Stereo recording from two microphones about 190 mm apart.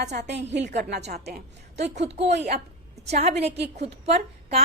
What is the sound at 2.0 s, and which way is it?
A woman's voice, 35° right (ahead or behind).